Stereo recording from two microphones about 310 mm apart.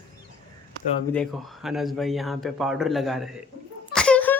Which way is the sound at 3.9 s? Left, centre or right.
Centre.